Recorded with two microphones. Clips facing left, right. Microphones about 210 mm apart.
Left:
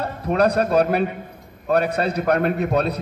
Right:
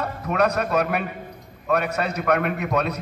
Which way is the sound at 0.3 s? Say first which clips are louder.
Left 4 dB; 35° left (ahead or behind).